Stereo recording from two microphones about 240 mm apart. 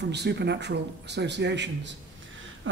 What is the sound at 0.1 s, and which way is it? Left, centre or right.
A woman's voice, right.